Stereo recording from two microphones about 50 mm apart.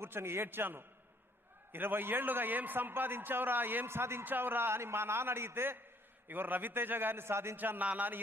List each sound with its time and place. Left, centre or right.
0.0 s a man's voice: right
3.8 s a man's voice: right
4.2 s a man's voice: right
6.2 s a man's voice: right
7.5 s a man's voice: right